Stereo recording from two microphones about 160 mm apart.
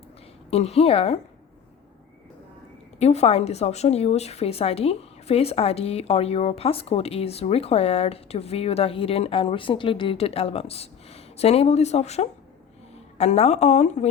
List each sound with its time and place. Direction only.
0.5 s a woman's voice: 40° left (ahead or behind)
3.0 s a woman's voice: 40° left (ahead or behind)